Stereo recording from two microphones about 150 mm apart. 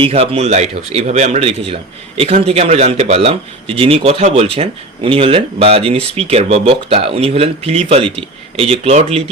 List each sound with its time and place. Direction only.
0.0 s speech: 45° right (ahead or behind)